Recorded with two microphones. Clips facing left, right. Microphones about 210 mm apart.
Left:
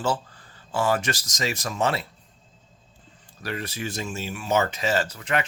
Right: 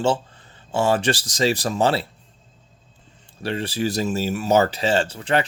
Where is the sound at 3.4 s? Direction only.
30° right (ahead or behind).